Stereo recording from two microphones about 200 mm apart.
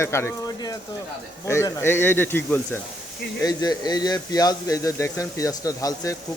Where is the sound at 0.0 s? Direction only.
15° left (ahead or behind).